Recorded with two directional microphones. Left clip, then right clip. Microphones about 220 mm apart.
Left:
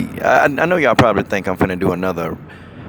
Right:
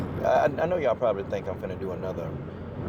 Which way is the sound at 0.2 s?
35° left (ahead or behind).